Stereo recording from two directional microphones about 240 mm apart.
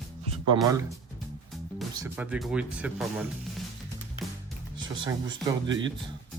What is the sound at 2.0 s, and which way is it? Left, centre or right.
Speech, centre.